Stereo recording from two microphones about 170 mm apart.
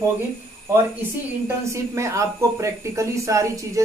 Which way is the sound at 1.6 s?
15° right (ahead or behind).